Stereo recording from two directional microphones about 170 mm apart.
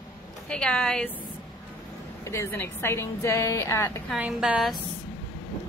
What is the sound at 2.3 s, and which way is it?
A woman's voice, 15° left (ahead or behind).